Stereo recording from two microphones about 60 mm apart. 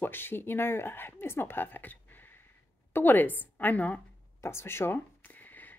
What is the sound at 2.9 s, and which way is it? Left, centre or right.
A woman's voice, left.